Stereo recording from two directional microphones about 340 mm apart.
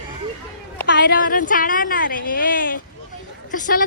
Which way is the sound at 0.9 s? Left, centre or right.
Left.